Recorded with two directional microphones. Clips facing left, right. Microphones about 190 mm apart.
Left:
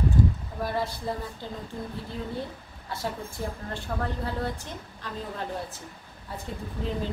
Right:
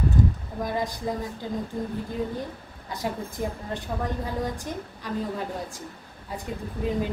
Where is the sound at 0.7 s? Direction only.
15° right (ahead or behind).